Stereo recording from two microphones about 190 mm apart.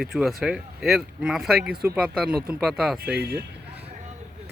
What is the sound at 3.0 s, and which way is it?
Speech, 55° right (ahead or behind).